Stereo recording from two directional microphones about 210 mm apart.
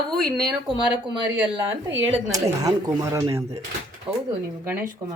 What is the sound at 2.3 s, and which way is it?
Speech, 15° right (ahead or behind).